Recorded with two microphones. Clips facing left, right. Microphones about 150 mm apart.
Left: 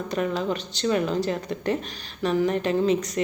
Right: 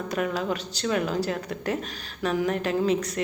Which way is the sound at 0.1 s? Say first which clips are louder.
Left 2 dB; 5° right (ahead or behind).